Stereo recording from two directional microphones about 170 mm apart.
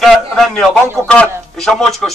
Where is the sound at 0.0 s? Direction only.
Centre (ahead or behind).